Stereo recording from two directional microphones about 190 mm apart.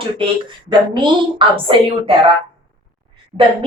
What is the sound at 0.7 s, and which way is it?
A woman's voice, 25° right (ahead or behind).